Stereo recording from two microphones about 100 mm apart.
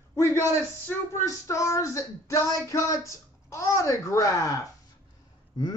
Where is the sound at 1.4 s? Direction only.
35° left (ahead or behind).